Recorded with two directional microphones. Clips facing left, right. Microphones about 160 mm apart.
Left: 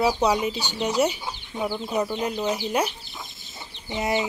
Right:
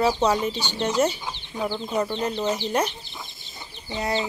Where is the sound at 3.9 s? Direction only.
20° left (ahead or behind).